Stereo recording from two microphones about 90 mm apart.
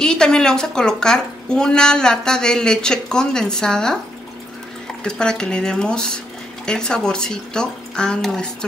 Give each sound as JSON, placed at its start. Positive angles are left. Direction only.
{"t": 0.0, "sound": "a woman's voice", "side_deg": 5}
{"t": 5.0, "sound": "a woman's voice", "side_deg": 10}